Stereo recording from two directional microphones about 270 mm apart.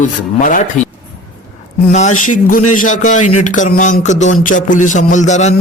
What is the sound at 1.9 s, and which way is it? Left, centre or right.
Speech, left.